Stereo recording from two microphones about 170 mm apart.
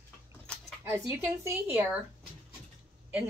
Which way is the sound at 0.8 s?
15° right (ahead or behind).